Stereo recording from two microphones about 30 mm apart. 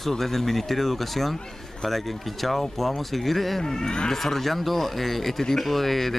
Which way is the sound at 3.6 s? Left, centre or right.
Centre.